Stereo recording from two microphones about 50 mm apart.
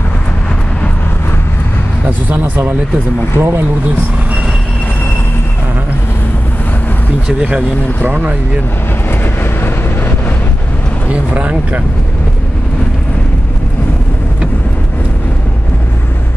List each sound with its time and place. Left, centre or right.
2.0 s speech: right
3.3 s speech: right
7.3 s speech: right
9.2 s vehicle: left
11.1 s speech: right